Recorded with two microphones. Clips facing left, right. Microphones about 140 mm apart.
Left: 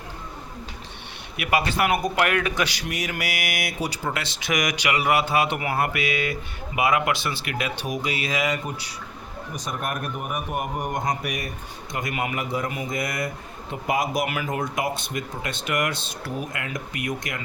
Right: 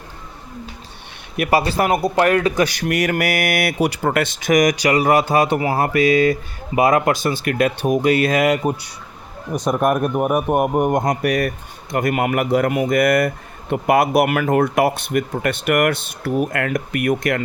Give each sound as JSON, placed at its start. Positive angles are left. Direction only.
{"t": 1.4, "sound": "speech", "side_deg": -35}
{"t": 2.6, "sound": "a man's voice", "side_deg": -50}